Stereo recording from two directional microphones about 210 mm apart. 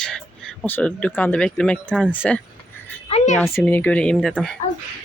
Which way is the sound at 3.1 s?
30° left (ahead or behind).